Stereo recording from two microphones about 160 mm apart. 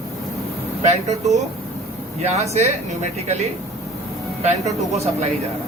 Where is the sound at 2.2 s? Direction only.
45° right (ahead or behind).